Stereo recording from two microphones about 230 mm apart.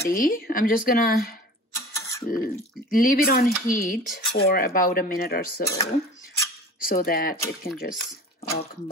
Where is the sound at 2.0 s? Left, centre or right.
Centre.